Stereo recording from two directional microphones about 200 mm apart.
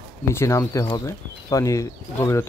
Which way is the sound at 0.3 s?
15° left (ahead or behind).